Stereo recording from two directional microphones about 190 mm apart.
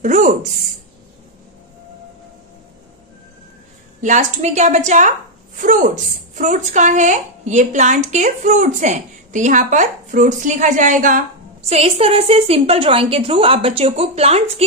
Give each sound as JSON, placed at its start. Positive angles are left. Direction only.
{"t": 0.0, "sound": "speech", "side_deg": -40}
{"t": 4.0, "sound": "speech", "side_deg": -40}